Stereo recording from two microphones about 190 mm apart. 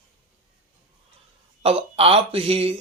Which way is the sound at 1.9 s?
30° right (ahead or behind).